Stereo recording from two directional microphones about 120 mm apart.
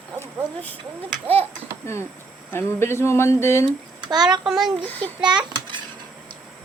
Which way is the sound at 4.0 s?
35° right (ahead or behind).